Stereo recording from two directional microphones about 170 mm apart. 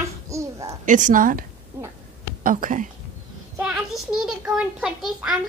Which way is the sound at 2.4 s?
55° right (ahead or behind).